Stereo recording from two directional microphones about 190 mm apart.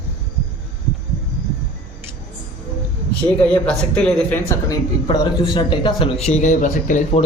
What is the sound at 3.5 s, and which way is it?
Speech, 5° left (ahead or behind).